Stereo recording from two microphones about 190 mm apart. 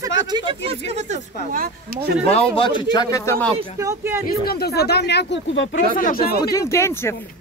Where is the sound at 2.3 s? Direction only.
30° left (ahead or behind); by 3.5 s 15° left (ahead or behind).